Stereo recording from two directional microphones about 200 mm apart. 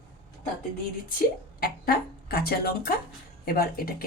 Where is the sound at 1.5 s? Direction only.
50° left (ahead or behind).